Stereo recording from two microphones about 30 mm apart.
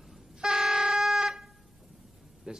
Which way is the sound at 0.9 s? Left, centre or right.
Centre.